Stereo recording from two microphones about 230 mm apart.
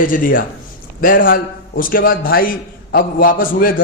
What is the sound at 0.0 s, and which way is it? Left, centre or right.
A man's voice, left.